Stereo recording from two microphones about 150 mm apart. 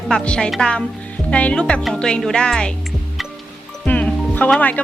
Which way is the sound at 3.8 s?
10° left (ahead or behind).